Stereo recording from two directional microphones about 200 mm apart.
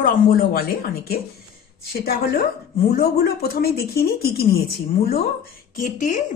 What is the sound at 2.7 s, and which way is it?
Speech, 50° left (ahead or behind).